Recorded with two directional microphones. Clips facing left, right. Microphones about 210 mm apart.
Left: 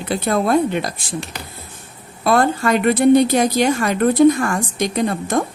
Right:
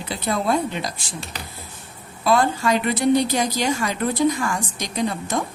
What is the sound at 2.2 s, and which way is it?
A woman's voice, 55° left (ahead or behind).